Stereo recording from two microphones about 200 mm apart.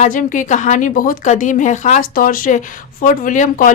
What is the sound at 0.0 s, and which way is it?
Speech, 40° left (ahead or behind).